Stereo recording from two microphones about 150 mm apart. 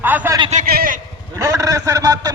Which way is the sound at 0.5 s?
75° right (ahead or behind).